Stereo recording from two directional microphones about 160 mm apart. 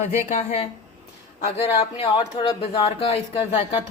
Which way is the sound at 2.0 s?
30° left (ahead or behind).